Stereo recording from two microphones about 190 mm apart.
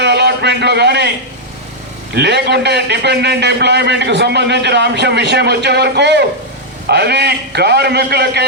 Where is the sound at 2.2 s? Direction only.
60° right (ahead or behind).